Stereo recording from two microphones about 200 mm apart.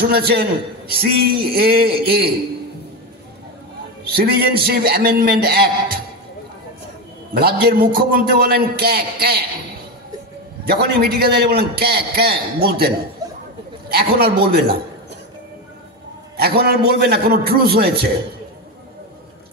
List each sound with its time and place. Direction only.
0.0 s a man's voice: 50° right (ahead or behind)
4.1 s a man's voice: 50° right (ahead or behind)
7.3 s a man's voice: 50° right (ahead or behind)
10.6 s a man's voice: 50° right (ahead or behind)
13.2 s a sound: 15° right (ahead or behind)
13.8 s a man's voice: 50° right (ahead or behind)
16.3 s a man's voice: 50° right (ahead or behind)